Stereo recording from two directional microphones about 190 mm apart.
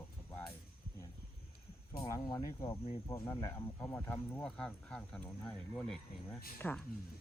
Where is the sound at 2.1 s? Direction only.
20° left (ahead or behind).